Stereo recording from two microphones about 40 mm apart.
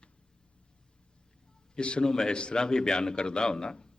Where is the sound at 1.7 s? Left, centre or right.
Left.